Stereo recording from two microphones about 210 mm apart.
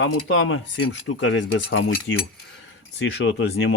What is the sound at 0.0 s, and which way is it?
Speech, 70° left (ahead or behind).